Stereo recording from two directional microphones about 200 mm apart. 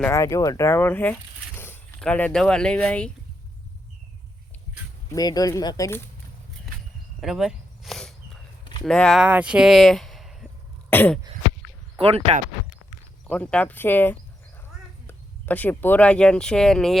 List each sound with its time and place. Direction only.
0.0 s speech: 15° left (ahead or behind)
5.1 s speech: 20° left (ahead or behind)
7.2 s a sound: centre (ahead or behind)
8.8 s speech: 5° left (ahead or behind)
10.8 s throat clearing: 10° left (ahead or behind)
11.9 s speech: 30° right (ahead or behind)
13.2 s speech: 5° left (ahead or behind)